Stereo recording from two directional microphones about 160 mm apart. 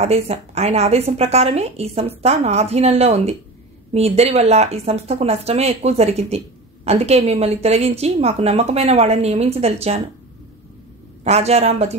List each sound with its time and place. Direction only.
0.0 s speech: 40° right (ahead or behind)
11.2 s a man's voice: 40° right (ahead or behind)